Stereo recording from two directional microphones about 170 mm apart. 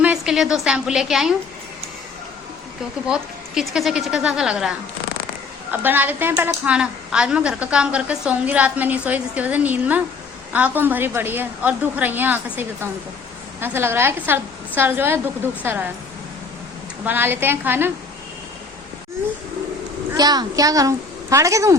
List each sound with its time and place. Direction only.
0.0 s a woman's voice: 5° right (ahead or behind)
3.1 s speech: centre (ahead or behind)
5.8 s a woman's voice: 10° right (ahead or behind)
17.1 s a woman's voice: 10° right (ahead or behind)
20.1 s a child's voice: 25° right (ahead or behind)